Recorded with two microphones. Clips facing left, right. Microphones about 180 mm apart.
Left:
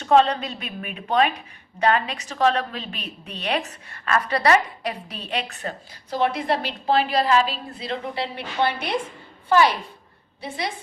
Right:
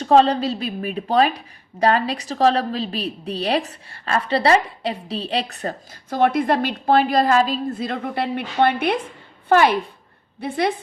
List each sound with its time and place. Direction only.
0.0 s a woman's voice: 35° right (ahead or behind); by 10.8 s 55° right (ahead or behind)